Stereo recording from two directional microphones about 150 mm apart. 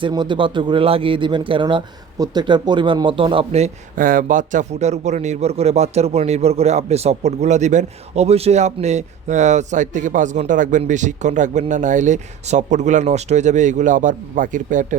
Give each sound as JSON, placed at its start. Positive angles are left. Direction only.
{"t": 0.0, "sound": "speech", "side_deg": -30}
{"t": 3.9, "sound": "a man's voice", "side_deg": -65}